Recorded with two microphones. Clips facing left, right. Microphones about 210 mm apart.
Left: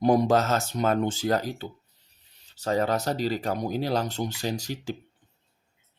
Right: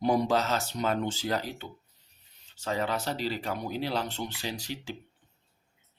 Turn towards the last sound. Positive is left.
turn(degrees=45)  # may be behind; listen again after turning